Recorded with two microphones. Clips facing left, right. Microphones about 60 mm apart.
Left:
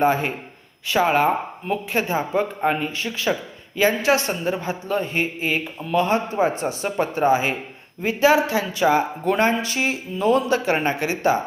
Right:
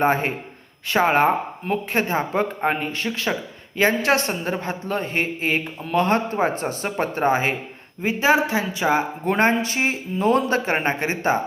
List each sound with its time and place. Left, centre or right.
0.0 s a man's voice: right
8.0 s speech: right